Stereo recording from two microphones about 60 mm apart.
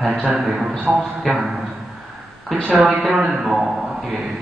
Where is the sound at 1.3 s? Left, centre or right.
Centre.